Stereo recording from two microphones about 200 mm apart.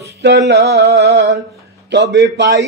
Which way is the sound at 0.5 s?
55° right (ahead or behind).